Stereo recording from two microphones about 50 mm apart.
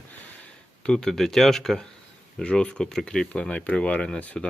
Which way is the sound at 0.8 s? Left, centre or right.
Centre.